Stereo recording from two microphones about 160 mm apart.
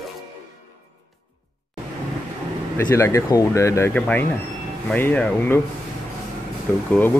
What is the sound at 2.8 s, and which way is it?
Speech, 20° left (ahead or behind).